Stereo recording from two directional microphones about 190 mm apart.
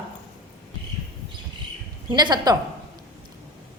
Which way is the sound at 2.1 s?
20° right (ahead or behind).